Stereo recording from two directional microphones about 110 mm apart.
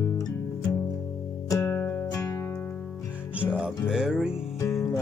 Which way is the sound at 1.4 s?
25° left (ahead or behind).